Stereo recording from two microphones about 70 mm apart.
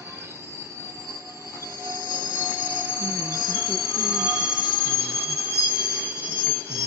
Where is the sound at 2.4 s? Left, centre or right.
Right.